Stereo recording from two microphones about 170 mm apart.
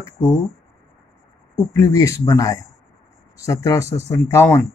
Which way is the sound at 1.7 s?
20° left (ahead or behind).